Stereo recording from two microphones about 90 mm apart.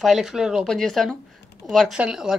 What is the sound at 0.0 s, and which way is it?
A woman's voice, 5° right (ahead or behind).